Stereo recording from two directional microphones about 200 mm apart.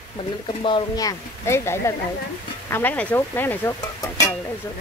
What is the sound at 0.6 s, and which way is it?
Speech, 20° left (ahead or behind).